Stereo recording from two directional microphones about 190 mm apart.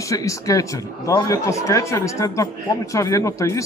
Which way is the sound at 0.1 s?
15° left (ahead or behind).